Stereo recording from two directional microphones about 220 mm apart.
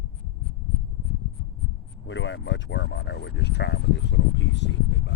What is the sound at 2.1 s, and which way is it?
Speech, 55° left (ahead or behind).